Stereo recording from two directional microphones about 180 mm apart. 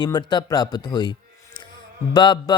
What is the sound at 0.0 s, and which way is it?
Speech, 25° left (ahead or behind).